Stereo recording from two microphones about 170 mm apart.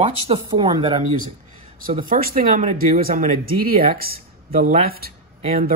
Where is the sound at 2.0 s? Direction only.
55° right (ahead or behind).